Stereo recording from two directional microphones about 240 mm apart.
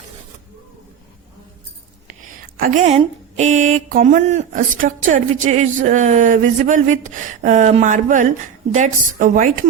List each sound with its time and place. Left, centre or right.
2.7 s speech: right